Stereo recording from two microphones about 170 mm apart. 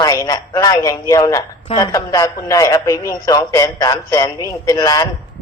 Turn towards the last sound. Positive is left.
turn(degrees=20)  # may be behind; listen again after turning